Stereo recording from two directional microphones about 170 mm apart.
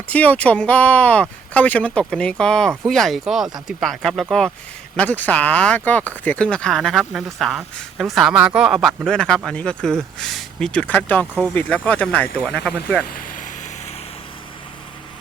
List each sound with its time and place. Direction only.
0.1 s speech: 10° left (ahead or behind)
13.1 s vehicle: 55° left (ahead or behind)